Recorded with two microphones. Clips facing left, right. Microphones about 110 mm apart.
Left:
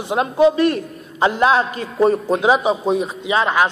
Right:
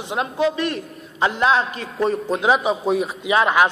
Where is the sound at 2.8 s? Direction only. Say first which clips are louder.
Left 1 dB; 5° right (ahead or behind).